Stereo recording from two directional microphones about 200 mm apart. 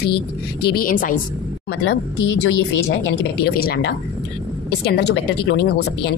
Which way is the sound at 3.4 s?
50° left (ahead or behind).